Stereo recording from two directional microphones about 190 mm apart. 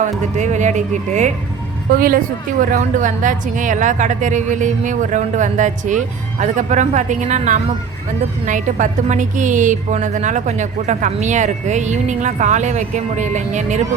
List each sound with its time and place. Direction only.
0.3 s a woman's voice: 40° right (ahead or behind)